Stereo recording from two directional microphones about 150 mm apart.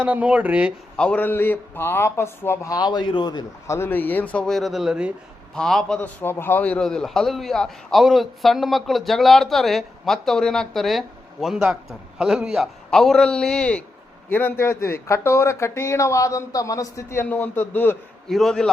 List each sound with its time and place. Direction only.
0.0 s speech: 10° right (ahead or behind)
0.9 s speech: 5° left (ahead or behind); by 3.8 s 30° left (ahead or behind)
3.8 s a man's voice: 15° left (ahead or behind)
18.3 s a man's voice: centre (ahead or behind)